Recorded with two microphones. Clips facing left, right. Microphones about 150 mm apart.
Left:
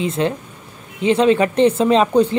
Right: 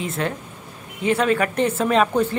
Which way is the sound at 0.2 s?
25° left (ahead or behind).